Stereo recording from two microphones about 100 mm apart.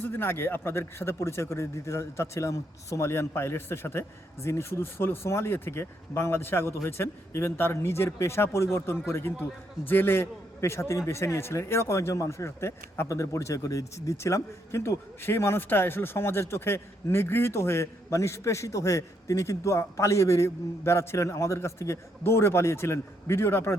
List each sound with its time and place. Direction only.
0.0 s a man's voice: 20° left (ahead or behind)